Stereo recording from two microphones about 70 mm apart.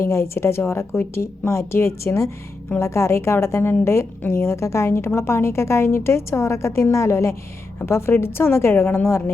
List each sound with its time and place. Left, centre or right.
0.1 s a woman's voice: left